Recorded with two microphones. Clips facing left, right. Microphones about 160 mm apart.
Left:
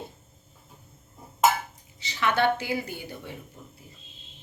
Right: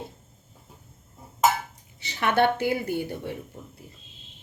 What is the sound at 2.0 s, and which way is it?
A woman's voice, 55° right (ahead or behind).